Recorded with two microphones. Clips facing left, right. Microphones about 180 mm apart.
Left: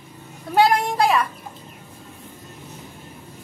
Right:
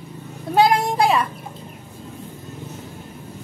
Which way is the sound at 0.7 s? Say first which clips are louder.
Right 1 dB; 25° right (ahead or behind).